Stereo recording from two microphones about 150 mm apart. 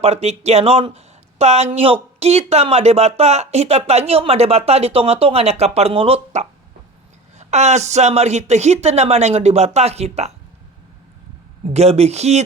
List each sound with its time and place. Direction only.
0.0 s speech: 45° right (ahead or behind)
11.7 s speech: 45° right (ahead or behind)